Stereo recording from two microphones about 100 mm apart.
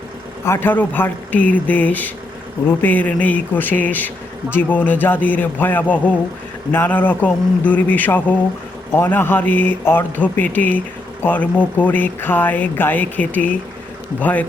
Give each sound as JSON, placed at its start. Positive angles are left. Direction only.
{"t": 0.4, "sound": "speech", "side_deg": 25}